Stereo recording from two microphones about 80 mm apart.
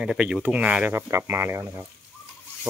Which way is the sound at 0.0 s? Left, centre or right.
Centre.